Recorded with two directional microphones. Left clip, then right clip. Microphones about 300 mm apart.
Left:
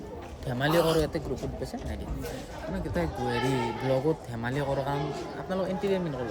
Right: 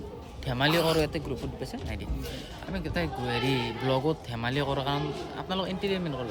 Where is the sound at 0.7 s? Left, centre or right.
Centre.